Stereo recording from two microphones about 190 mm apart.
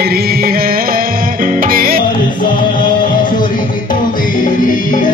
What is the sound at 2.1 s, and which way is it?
Music, 45° left (ahead or behind).